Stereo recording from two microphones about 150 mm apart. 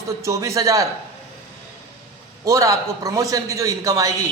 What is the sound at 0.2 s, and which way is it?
Speech, 20° right (ahead or behind).